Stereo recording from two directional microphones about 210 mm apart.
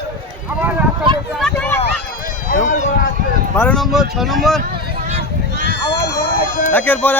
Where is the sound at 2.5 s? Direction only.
35° left (ahead or behind).